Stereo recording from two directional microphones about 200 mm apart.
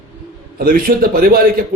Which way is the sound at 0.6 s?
45° right (ahead or behind).